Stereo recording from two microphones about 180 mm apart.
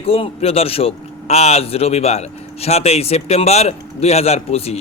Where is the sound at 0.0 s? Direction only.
30° left (ahead or behind).